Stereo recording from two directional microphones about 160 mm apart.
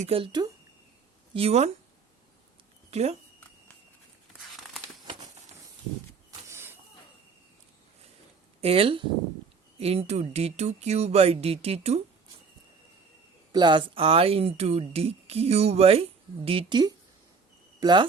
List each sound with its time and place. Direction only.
0.0 s speech: 35° right (ahead or behind)
1.3 s speech: 40° right (ahead or behind)
2.9 s speech: 40° right (ahead or behind)
6.5 s a sound: 15° right (ahead or behind)
8.6 s speech: 35° right (ahead or behind)
13.5 s speech: 30° right (ahead or behind)